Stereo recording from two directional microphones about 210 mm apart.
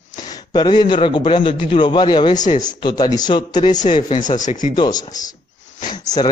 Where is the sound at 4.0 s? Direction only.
35° left (ahead or behind).